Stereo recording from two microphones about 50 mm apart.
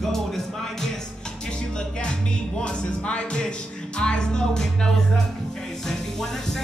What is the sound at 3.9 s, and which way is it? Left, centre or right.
Music, centre.